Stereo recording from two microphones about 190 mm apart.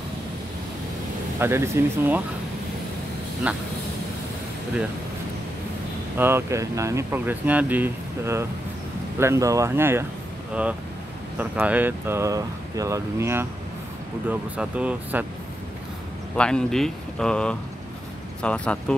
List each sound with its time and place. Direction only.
1.4 s speech: 15° right (ahead or behind)
3.5 s speech: 5° right (ahead or behind)
6.1 s speech: 10° right (ahead or behind)
16.3 s speech: 5° left (ahead or behind)